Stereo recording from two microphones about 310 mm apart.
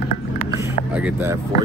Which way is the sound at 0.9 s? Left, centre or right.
Centre.